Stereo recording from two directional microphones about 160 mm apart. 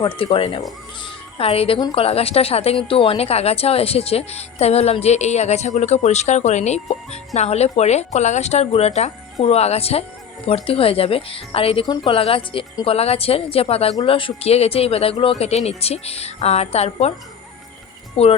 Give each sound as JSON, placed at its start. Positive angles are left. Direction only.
{"t": 0.2, "sound": "a woman's voice", "side_deg": 35}
{"t": 18.2, "sound": "a woman's voice", "side_deg": 40}